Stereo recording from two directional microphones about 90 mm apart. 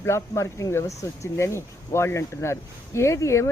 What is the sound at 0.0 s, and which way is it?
Speech, 30° left (ahead or behind).